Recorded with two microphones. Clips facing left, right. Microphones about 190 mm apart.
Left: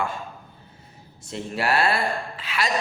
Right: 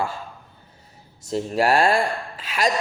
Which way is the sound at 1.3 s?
40° right (ahead or behind).